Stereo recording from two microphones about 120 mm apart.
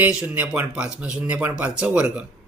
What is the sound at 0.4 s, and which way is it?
Speech, 20° right (ahead or behind).